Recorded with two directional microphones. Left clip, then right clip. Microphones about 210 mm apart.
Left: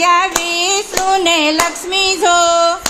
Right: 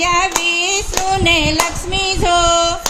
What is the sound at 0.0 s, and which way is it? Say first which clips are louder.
Child singing: left 2 dB; 10° left (ahead or behind).